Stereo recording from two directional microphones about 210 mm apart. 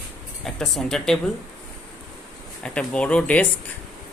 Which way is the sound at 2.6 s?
5° left (ahead or behind).